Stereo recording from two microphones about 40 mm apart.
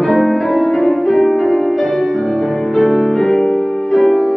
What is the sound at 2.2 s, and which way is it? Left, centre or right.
Music, left.